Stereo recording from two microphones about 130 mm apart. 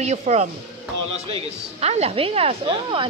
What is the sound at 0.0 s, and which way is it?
Speech, 60° right (ahead or behind).